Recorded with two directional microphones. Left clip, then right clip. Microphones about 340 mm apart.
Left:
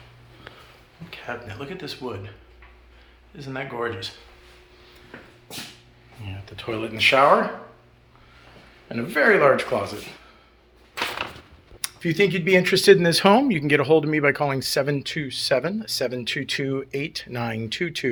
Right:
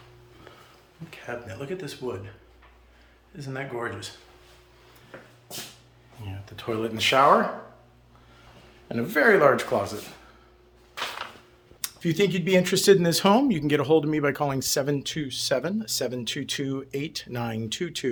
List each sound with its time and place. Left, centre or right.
1.1 s speech: centre
3.3 s speech: centre
6.4 s speech: centre
8.9 s speech: centre
11.8 s speech: centre